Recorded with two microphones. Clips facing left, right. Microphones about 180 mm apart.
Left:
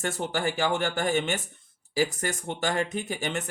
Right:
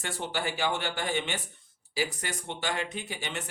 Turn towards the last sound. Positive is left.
turn(degrees=50)  # may be behind; listen again after turning